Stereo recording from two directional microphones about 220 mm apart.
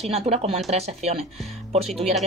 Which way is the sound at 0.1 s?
25° right (ahead or behind).